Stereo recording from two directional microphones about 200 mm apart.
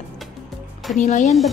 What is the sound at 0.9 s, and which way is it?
Speech, 40° left (ahead or behind).